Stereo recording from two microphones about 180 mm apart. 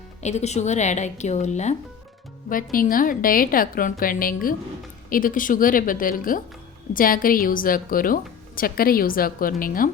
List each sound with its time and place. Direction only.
0.2 s a woman's voice: 40° left (ahead or behind)